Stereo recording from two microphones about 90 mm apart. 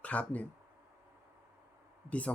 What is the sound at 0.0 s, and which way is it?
Speech, 15° left (ahead or behind).